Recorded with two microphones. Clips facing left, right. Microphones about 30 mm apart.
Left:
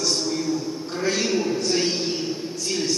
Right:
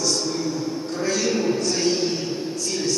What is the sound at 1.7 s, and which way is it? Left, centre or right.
Speech, left.